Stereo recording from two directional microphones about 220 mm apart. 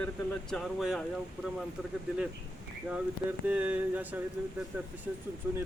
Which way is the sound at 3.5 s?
5° right (ahead or behind).